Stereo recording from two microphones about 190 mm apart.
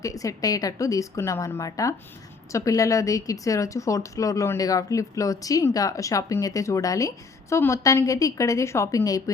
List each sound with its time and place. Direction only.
0.0 s a woman's voice: 15° left (ahead or behind)